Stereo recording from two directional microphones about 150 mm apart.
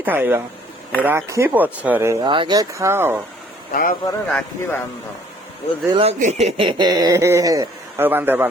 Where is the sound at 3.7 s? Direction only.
70° left (ahead or behind).